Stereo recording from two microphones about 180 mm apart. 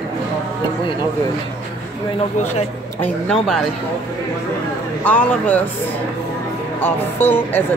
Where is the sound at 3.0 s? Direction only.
5° left (ahead or behind).